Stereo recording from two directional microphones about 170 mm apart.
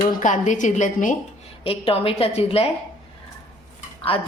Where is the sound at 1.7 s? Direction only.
35° left (ahead or behind).